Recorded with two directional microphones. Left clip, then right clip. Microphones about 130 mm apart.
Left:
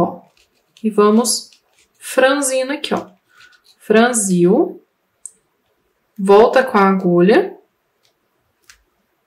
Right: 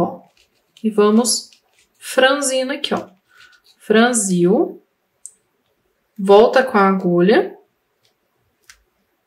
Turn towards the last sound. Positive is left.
turn(degrees=10)  # may be behind; listen again after turning